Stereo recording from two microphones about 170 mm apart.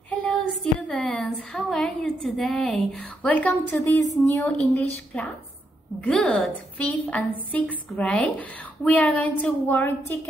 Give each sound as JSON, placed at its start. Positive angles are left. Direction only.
{"t": 0.1, "sound": "a woman's voice", "side_deg": 5}
{"t": 4.5, "sound": "a woman's voice", "side_deg": 5}